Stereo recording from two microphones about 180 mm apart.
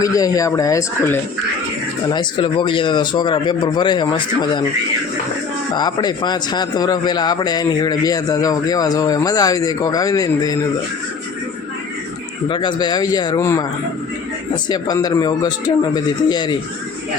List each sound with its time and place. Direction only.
0.0 s a man's voice: 20° left (ahead or behind)
2.1 s a man's voice: 25° left (ahead or behind)
5.7 s a man's voice: 25° left (ahead or behind)
12.5 s a man's voice: 25° left (ahead or behind)